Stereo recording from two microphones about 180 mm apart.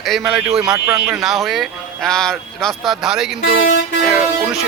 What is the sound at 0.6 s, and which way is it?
Speech, 20° right (ahead or behind).